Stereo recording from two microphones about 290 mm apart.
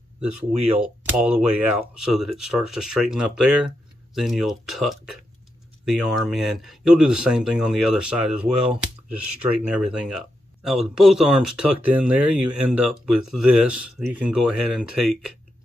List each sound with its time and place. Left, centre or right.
1.1 s speech: centre